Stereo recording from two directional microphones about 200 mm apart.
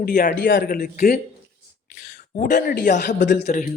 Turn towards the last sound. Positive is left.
turn(degrees=40)  # may be behind; listen again after turning